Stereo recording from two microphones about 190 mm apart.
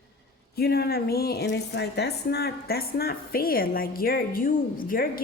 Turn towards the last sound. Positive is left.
turn(degrees=50)  # may be behind; listen again after turning